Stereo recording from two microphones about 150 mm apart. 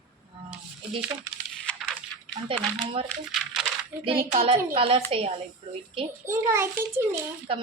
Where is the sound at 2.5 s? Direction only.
35° right (ahead or behind).